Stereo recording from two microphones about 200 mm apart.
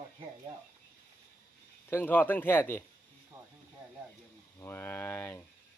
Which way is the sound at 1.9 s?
10° left (ahead or behind).